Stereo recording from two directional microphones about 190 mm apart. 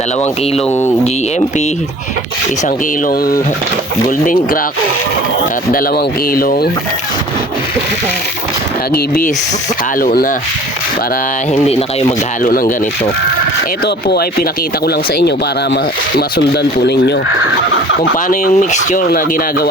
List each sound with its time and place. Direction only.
3.1 s speech: 50° left (ahead or behind)
6.3 s speech: 50° left (ahead or behind)
10.0 s speech: 50° left (ahead or behind)
11.5 s speech: 35° left (ahead or behind)
12.5 s speech: 50° left (ahead or behind)
13.8 s speech: 55° left (ahead or behind)
16.8 s speech: 65° left (ahead or behind)
18.3 s speech: 40° left (ahead or behind)